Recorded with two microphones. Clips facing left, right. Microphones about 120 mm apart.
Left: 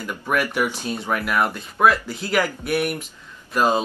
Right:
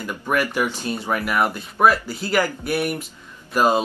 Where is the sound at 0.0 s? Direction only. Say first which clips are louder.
Right 1 dB; centre (ahead or behind).